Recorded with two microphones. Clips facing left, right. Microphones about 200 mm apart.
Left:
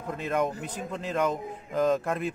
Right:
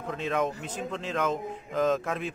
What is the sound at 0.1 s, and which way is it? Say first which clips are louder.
A man's voice: left 1 dB; centre (ahead or behind).